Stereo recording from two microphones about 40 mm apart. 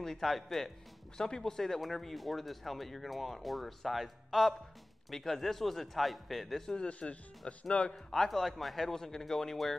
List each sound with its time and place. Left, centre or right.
0.0 s speech: centre
1.1 s speech: centre
6.9 s speech: left
7.9 s speech: centre